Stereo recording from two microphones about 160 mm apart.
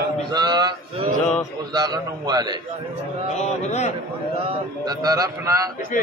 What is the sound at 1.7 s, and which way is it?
Speech, 25° right (ahead or behind).